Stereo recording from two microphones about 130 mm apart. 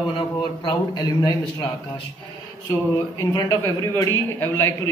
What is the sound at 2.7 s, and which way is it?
A man's voice, 25° left (ahead or behind).